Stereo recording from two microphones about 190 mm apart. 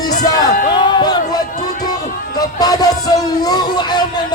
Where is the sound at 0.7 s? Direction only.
25° left (ahead or behind).